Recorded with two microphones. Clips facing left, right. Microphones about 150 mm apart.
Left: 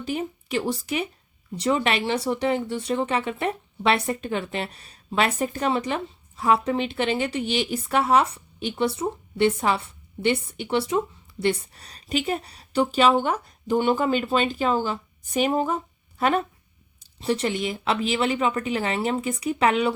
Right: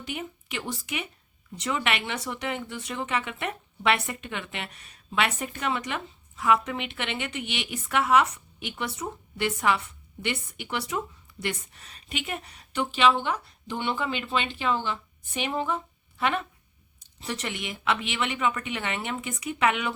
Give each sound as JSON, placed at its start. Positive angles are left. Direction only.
{"t": 0.0, "sound": "speech", "side_deg": 35}